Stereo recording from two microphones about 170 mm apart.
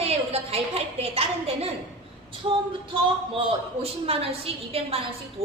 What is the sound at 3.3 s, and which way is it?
A woman's voice, 35° right (ahead or behind).